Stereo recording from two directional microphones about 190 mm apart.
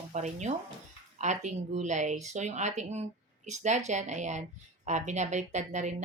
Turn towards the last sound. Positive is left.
turn(degrees=-40)  # may be behind; listen again after turning